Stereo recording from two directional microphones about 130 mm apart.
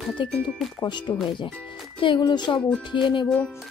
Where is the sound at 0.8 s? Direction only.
35° left (ahead or behind).